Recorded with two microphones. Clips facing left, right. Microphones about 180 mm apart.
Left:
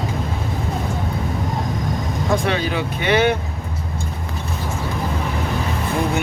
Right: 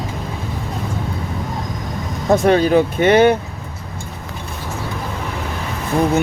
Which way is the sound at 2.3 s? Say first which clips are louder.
Right 9 dB; 45° right (ahead or behind).